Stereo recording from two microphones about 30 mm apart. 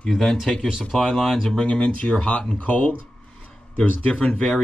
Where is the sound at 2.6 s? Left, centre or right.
Left.